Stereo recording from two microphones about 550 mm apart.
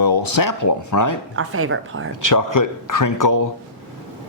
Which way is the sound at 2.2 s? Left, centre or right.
Left.